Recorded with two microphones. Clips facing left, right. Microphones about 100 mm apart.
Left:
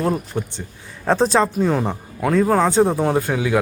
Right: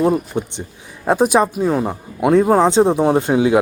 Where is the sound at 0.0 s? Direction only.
15° right (ahead or behind).